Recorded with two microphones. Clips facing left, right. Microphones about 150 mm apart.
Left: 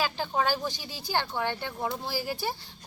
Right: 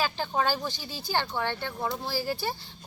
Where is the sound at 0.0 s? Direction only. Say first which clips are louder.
Even; 5° left (ahead or behind).